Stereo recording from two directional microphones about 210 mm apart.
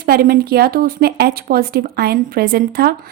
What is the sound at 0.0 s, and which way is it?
A woman's voice, 45° right (ahead or behind).